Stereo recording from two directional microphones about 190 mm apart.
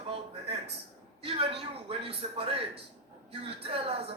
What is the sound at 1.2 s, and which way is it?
A man's voice, 30° right (ahead or behind).